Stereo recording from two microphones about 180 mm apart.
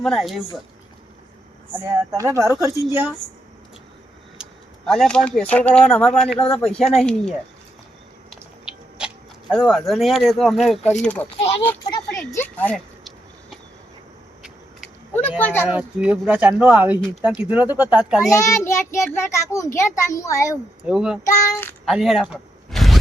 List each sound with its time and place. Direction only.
0.0 s speech: centre (ahead or behind)
2.1 s speech: 15° right (ahead or behind)
4.9 s speech: 5° left (ahead or behind)
9.0 s a child's voice: 5° right (ahead or behind); by 11.8 s 10° left (ahead or behind)
12.3 s a sound: 10° left (ahead or behind)
15.1 s speech: 10° left (ahead or behind)
15.7 s speech: 5° right (ahead or behind)
18.3 s a child's voice: 15° left (ahead or behind)
20.8 s speech: 5° right (ahead or behind)
21.2 s a child's voice: 10° left (ahead or behind)
21.8 s a sound: centre (ahead or behind)